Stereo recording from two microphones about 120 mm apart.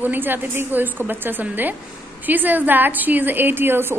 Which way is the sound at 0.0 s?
15° right (ahead or behind).